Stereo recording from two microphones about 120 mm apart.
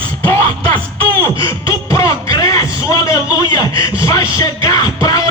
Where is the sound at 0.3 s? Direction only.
20° left (ahead or behind).